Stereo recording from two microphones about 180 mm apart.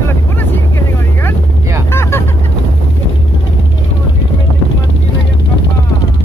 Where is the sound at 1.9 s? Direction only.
15° left (ahead or behind).